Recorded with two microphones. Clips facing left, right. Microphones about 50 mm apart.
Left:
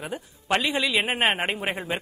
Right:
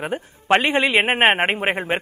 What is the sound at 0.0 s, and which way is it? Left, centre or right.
Speech, right.